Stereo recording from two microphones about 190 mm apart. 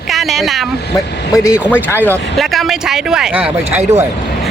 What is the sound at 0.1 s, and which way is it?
Speech, centre (ahead or behind).